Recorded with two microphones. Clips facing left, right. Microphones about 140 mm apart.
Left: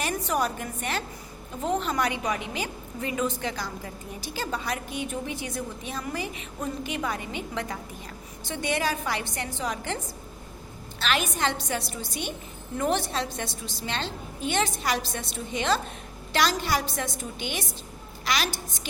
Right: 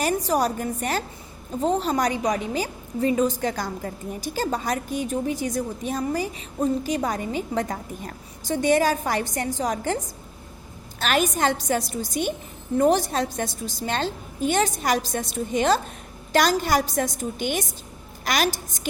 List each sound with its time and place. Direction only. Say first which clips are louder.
0.0 s a woman's voice: right 5 dB; 35° right (ahead or behind)
11.0 s a woman's voice: right 5 dB; 45° right (ahead or behind)